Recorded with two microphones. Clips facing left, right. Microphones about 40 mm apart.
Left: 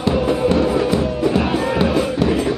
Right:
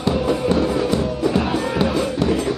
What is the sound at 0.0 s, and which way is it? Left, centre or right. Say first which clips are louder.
Music: left 2 dB; centre.